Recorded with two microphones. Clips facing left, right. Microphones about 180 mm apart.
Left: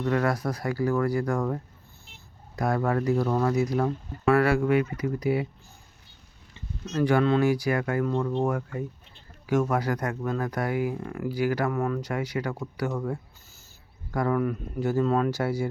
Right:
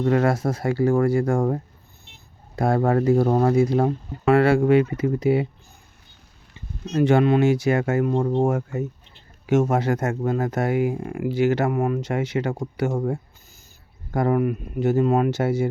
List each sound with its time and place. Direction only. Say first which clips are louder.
0.0 s speech: right 5 dB; 25° right (ahead or behind)
2.1 s a sound: right 5 dB; 30° right (ahead or behind)
3.3 s speech: right 6 dB; 30° right (ahead or behind)
6.8 s speech: right 5 dB; 25° right (ahead or behind)